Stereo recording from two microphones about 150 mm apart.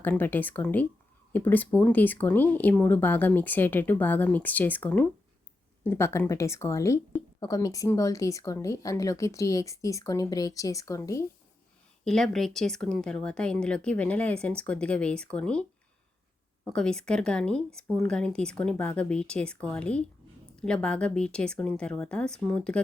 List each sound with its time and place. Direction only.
0.0 s speech: 10° left (ahead or behind)
12.0 s speech: 5° left (ahead or behind)
16.6 s speech: 5° left (ahead or behind)